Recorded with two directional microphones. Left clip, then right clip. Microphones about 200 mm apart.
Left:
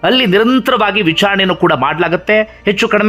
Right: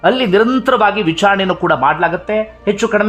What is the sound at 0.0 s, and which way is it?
A man's voice, 15° left (ahead or behind).